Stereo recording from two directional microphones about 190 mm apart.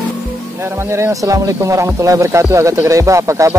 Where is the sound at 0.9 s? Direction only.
15° right (ahead or behind).